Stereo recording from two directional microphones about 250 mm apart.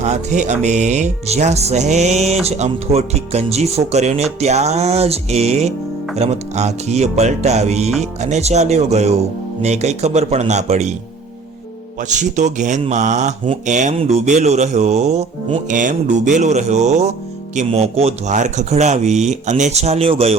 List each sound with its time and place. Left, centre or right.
0.0 s speech: right
11.9 s speech: right